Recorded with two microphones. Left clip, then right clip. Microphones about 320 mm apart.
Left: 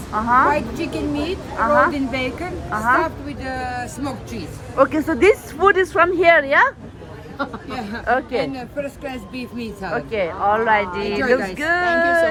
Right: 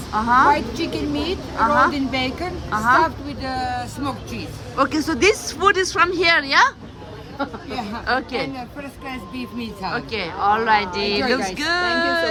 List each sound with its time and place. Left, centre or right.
0.1 s speech: centre
0.5 s a woman's voice: right
1.5 s speech: centre
1.9 s a woman's voice: right
2.6 s speech: centre
3.4 s a woman's voice: right
4.8 s speech: centre
8.0 s speech: centre
9.0 s speech: right
9.9 s speech: centre
11.0 s a woman's voice: right
11.5 s speech: centre